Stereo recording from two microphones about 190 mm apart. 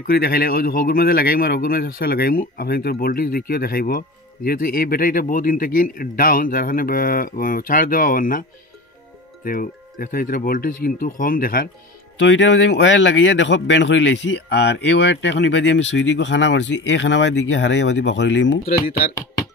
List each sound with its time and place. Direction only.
0.0 s speech: 55° left (ahead or behind)
12.2 s speech: 75° left (ahead or behind)